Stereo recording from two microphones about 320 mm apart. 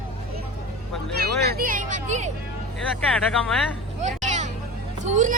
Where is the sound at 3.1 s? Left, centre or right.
Centre.